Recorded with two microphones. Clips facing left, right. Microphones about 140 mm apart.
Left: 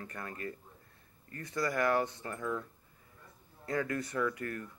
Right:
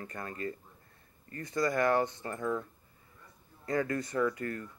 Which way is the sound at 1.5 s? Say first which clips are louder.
Right 4 dB; 15° right (ahead or behind).